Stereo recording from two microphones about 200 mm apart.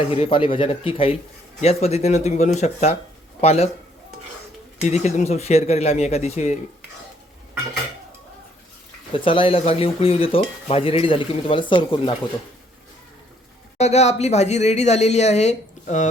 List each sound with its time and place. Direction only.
0.0 s speech: 30° left (ahead or behind)
4.8 s speech: 35° left (ahead or behind)
9.1 s speech: 25° left (ahead or behind)
13.7 s speech: 35° left (ahead or behind)